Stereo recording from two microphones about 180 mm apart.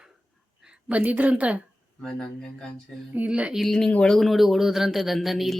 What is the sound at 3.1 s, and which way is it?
Speech, 10° right (ahead or behind).